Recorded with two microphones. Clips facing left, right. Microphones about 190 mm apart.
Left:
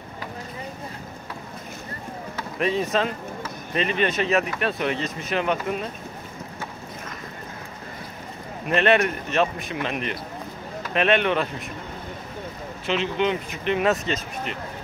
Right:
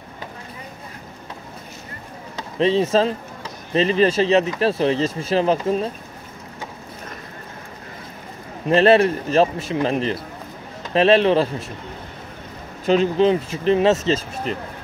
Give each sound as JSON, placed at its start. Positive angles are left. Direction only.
{"t": 2.3, "sound": "speech", "side_deg": -25}
{"t": 8.6, "sound": "speech", "side_deg": -30}
{"t": 12.8, "sound": "speech", "side_deg": -40}